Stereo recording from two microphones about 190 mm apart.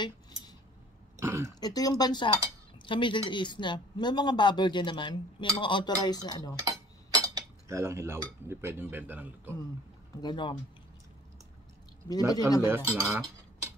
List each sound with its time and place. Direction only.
1.1 s speech: 15° right (ahead or behind)
1.5 s cutlery: 20° left (ahead or behind)
7.2 s speech: 15° right (ahead or behind)
10.2 s cutlery: 25° left (ahead or behind)
12.3 s cutlery: 20° left (ahead or behind)
12.6 s cutlery: 15° right (ahead or behind)